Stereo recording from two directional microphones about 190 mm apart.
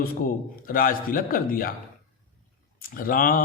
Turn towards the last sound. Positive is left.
turn(degrees=50)  # may be behind; listen again after turning